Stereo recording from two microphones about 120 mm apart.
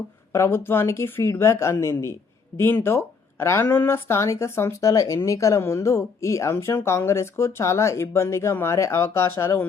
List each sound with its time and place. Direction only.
0.3 s speech: 20° left (ahead or behind)